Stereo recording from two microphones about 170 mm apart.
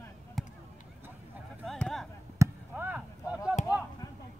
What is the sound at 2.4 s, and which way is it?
Chop, 10° right (ahead or behind).